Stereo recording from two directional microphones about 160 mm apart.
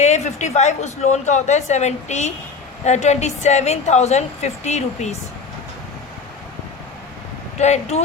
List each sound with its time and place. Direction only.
0.0 s a woman's voice: 45° left (ahead or behind)
7.6 s a woman's voice: 45° left (ahead or behind)